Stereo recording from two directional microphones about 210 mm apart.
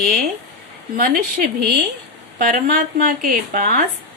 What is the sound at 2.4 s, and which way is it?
Speech, 40° right (ahead or behind).